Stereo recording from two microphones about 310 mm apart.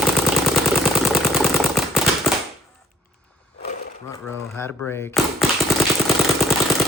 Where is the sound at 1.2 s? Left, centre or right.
Centre.